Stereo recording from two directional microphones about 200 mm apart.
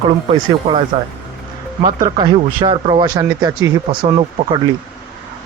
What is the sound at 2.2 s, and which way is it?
Speech, 25° right (ahead or behind).